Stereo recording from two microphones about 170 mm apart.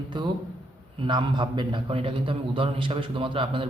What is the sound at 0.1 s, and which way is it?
A man's voice, 30° right (ahead or behind).